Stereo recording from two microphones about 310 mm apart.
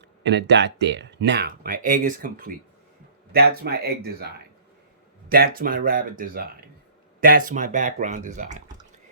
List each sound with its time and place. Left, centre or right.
0.2 s speech: right